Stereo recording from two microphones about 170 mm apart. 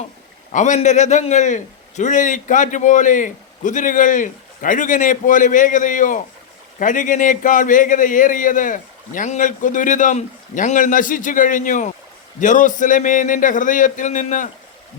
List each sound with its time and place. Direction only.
0.5 s a man's voice: 45° left (ahead or behind)